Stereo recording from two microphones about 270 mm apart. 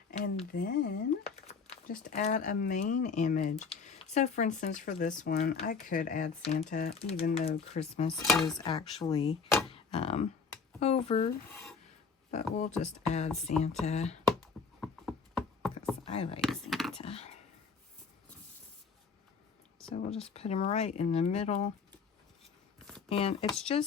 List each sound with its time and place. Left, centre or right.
0.1 s speech: left
8.1 s dishes: centre
8.5 s speech: centre
9.6 s a sound: left
10.8 s speech: left
12.8 s speech: left
14.4 s a sound: centre
16.0 s speech: left
16.4 s a sound: centre
17.0 s a sound: left
19.9 s speech: left
23.0 s speech: left